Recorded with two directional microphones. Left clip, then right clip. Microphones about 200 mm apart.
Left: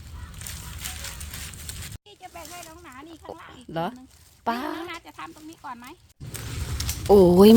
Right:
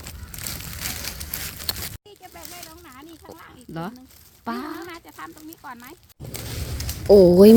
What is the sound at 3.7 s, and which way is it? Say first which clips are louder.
A woman's voice: left 5 dB; 20° left (ahead or behind).